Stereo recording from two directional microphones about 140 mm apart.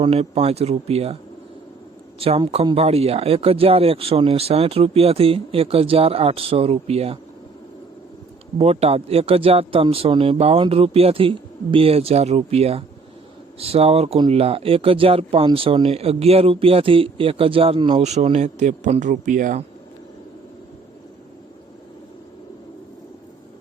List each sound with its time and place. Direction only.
0.0 s speech: 45° right (ahead or behind)
2.1 s speech: 45° right (ahead or behind)
8.5 s speech: 45° right (ahead or behind)
18.0 s a man's voice: 50° right (ahead or behind)